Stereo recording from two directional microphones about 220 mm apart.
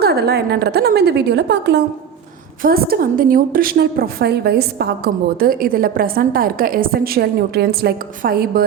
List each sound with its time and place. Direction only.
0.0 s a woman's voice: 45° right (ahead or behind)